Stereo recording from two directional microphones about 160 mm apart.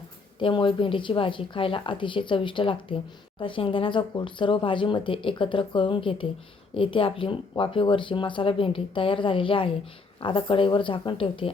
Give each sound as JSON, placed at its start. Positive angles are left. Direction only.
{"t": 0.3, "sound": "speech", "side_deg": 30}